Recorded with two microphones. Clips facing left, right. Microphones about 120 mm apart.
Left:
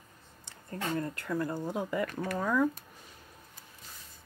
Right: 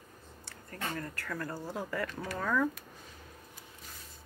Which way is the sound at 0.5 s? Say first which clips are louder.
Left 5 dB; 25° left (ahead or behind).